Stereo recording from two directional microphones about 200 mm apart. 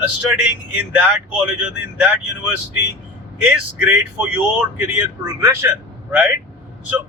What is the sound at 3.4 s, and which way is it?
Speech, 10° right (ahead or behind).